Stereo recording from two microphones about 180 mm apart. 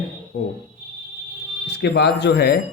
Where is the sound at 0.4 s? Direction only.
55° left (ahead or behind).